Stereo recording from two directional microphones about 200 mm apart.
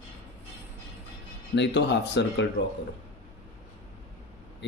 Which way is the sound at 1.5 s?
60° left (ahead or behind).